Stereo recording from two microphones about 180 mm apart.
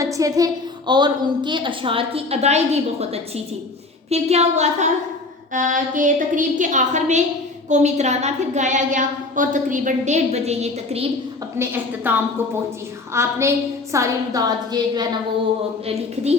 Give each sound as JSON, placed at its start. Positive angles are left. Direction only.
{"t": 0.0, "sound": "a woman's voice", "side_deg": -20}
{"t": 11.5, "sound": "a woman's voice", "side_deg": -10}